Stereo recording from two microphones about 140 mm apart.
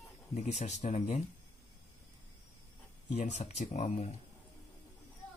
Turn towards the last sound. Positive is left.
turn(degrees=50)  # may be behind; listen again after turning